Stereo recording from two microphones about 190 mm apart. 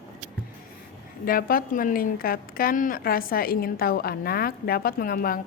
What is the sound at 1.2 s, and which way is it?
A woman's voice, 50° left (ahead or behind).